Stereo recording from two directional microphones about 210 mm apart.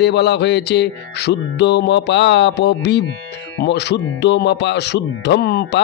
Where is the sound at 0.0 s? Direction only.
55° left (ahead or behind).